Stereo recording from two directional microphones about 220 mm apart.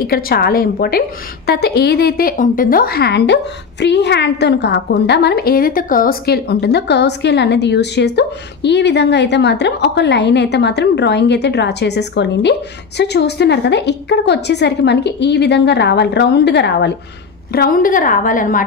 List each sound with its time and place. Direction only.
0.0 s a woman's voice: 45° left (ahead or behind)